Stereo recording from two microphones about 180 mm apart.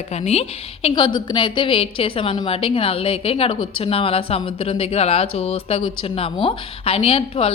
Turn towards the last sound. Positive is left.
turn(degrees=30)  # may be behind; listen again after turning